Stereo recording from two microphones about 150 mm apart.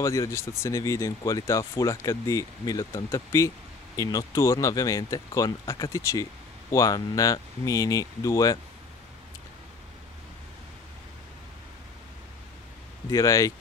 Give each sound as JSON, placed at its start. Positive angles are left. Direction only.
{"t": 0.0, "sound": "speech", "side_deg": 20}
{"t": 13.1, "sound": "speech", "side_deg": 20}